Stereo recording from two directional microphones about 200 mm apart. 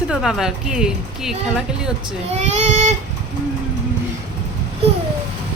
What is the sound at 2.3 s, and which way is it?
Child singing, 35° right (ahead or behind).